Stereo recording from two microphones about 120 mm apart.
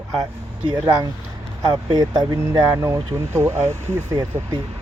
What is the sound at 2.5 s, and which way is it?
Speech, 20° right (ahead or behind).